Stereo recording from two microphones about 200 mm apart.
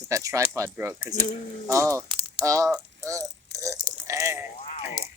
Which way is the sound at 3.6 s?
15° right (ahead or behind).